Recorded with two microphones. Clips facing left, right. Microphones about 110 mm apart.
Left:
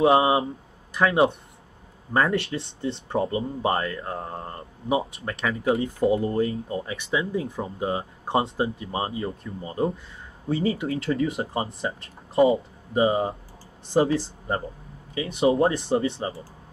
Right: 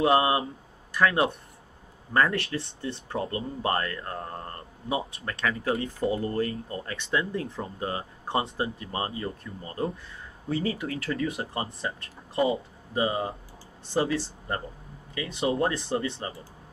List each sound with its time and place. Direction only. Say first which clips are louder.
0.0 s speech: left 4 dB; 25° left (ahead or behind)